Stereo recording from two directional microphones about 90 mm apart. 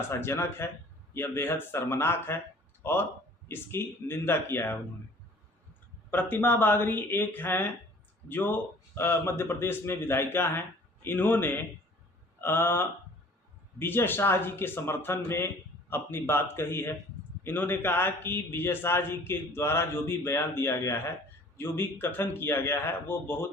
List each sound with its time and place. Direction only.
0.1 s a man's voice: 30° left (ahead or behind)
6.1 s a man's voice: 20° left (ahead or behind)